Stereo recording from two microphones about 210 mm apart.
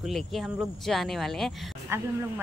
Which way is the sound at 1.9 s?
10° right (ahead or behind).